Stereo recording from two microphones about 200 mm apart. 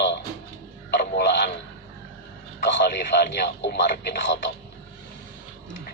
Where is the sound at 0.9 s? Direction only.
55° left (ahead or behind).